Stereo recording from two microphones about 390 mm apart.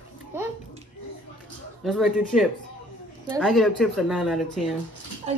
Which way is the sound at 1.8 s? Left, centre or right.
Centre.